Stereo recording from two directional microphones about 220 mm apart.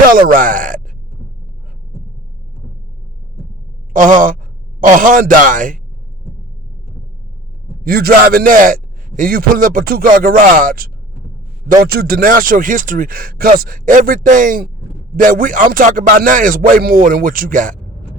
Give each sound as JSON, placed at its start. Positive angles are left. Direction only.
{"t": 0.1, "sound": "a man's voice", "side_deg": -40}
{"t": 3.9, "sound": "a man's voice", "side_deg": -35}
{"t": 7.9, "sound": "a man's voice", "side_deg": -45}